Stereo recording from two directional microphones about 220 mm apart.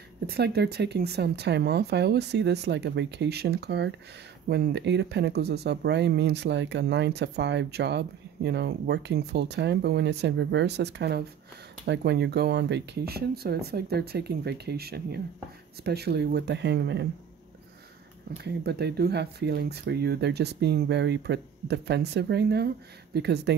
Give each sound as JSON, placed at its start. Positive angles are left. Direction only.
{"t": 0.3, "sound": "speech", "side_deg": -50}
{"t": 18.4, "sound": "speech", "side_deg": -50}